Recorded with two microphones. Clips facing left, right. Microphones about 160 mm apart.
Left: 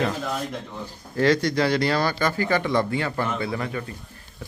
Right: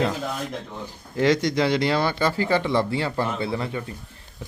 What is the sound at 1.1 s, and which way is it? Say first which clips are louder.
Speech: even; 20° right (ahead or behind).